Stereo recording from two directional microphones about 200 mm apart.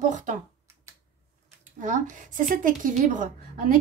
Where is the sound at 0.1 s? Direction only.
40° right (ahead or behind).